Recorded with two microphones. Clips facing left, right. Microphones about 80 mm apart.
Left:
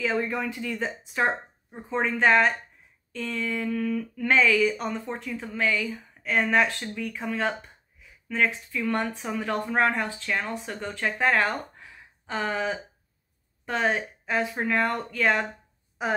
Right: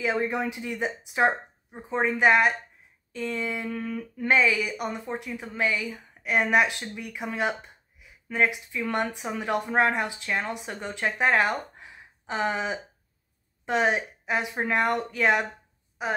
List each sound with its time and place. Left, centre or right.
0.0 s speech: centre
3.7 s humming: right
4.3 s speech: centre